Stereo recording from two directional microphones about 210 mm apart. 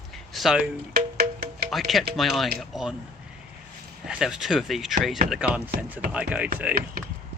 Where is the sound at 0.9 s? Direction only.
45° right (ahead or behind).